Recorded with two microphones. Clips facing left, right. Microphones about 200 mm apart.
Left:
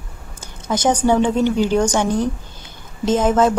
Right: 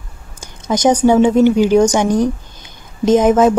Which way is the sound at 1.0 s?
15° right (ahead or behind).